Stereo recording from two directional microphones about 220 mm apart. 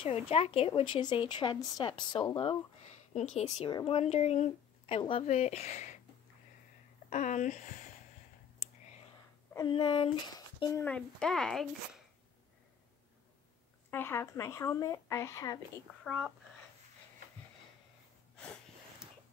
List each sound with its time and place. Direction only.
0.0 s speech: 25° left (ahead or behind)
7.1 s speech: 35° left (ahead or behind)
9.7 s speech: 20° left (ahead or behind); by 12.0 s centre (ahead or behind)
13.8 s speech: 10° left (ahead or behind)
16.0 s speech: centre (ahead or behind)
18.3 s a sound: 5° left (ahead or behind)